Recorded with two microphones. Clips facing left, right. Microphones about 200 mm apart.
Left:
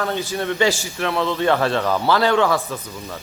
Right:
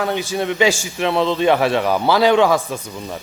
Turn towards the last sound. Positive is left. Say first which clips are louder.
# right 3 dB
turn(degrees=-15)  # may be behind; listen again after turning